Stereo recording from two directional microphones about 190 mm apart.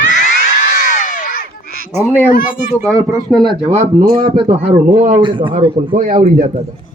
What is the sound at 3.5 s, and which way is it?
Speech, 30° right (ahead or behind).